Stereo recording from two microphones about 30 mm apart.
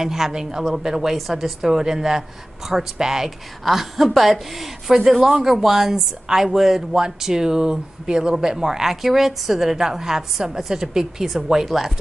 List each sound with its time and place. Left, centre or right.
0.0 s speech: centre
9.0 s speech: centre